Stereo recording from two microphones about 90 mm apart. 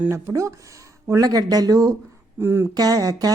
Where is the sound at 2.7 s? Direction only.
45° right (ahead or behind).